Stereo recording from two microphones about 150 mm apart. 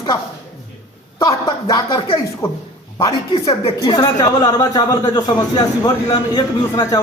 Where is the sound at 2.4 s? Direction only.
15° left (ahead or behind).